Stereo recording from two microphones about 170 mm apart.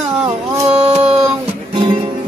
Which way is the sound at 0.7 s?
35° right (ahead or behind).